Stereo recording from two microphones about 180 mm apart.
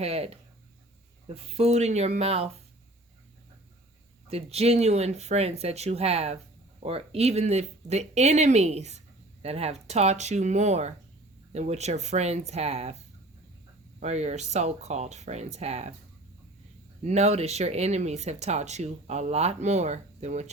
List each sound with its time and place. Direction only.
0.0 s speech: 35° right (ahead or behind)
1.5 s speech: 35° right (ahead or behind)
4.3 s speech: 35° right (ahead or behind)
14.0 s speech: 40° right (ahead or behind)
17.0 s speech: 40° right (ahead or behind)